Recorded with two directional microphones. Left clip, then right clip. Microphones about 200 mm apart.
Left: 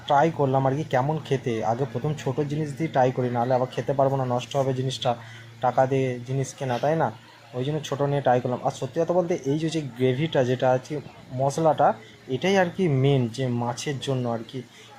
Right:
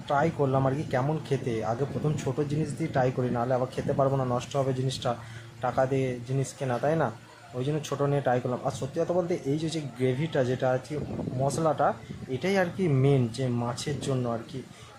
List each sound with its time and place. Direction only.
0.1 s speech: centre (ahead or behind)